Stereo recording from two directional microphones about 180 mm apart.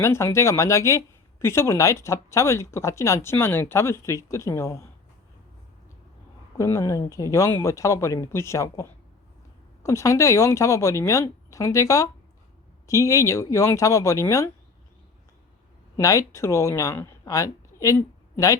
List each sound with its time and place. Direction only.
0.0 s speech: 15° left (ahead or behind)
6.6 s speech: 15° left (ahead or behind)
16.0 s a woman's voice: 15° left (ahead or behind)